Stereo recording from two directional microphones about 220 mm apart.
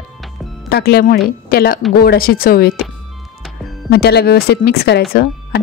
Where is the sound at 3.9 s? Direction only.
45° left (ahead or behind).